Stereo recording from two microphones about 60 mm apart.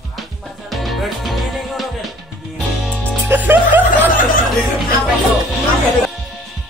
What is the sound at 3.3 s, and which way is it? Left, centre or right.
Snicker, right.